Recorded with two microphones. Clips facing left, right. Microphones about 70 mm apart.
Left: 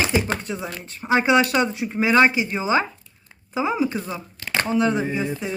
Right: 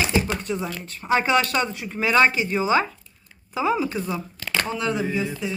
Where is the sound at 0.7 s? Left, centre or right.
Left.